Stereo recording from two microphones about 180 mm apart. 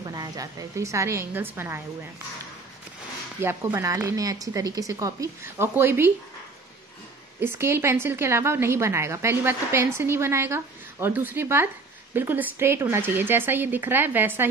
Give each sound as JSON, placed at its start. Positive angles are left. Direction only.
{"t": 0.0, "sound": "a woman's voice", "side_deg": -20}
{"t": 3.3, "sound": "a woman's voice", "side_deg": -15}
{"t": 7.3, "sound": "a woman's voice", "side_deg": -15}